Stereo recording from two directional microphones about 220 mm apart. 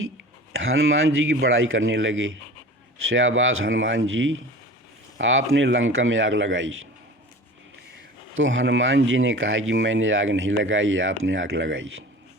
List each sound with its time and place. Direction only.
0.5 s speech: 65° right (ahead or behind)
8.4 s speech: 60° right (ahead or behind)